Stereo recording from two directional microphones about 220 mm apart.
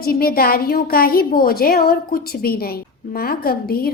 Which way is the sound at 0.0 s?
40° left (ahead or behind).